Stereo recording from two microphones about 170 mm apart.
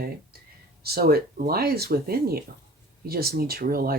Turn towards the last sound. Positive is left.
turn(degrees=-60)  # may be behind; listen again after turning